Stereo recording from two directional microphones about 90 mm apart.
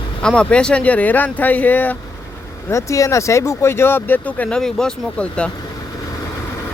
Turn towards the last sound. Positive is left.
turn(degrees=10)  # may be behind; listen again after turning